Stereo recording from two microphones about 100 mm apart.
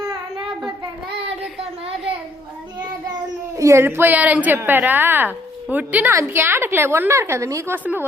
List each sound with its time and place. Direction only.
3.6 s a woman's voice: 30° right (ahead or behind)